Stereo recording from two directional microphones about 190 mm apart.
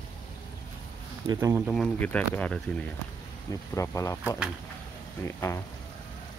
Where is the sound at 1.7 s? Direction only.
5° left (ahead or behind).